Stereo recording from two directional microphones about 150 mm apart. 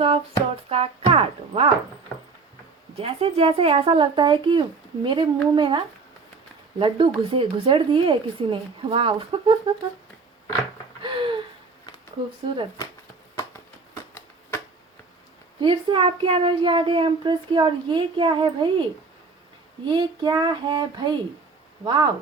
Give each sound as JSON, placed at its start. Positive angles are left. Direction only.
{"t": 0.0, "sound": "speech", "side_deg": -40}
{"t": 3.0, "sound": "speech", "side_deg": -40}
{"t": 11.0, "sound": "a sound", "side_deg": -35}
{"t": 14.1, "sound": "shuffling cards", "side_deg": 15}
{"t": 15.6, "sound": "speech", "side_deg": -35}
{"t": 19.9, "sound": "speech", "side_deg": -30}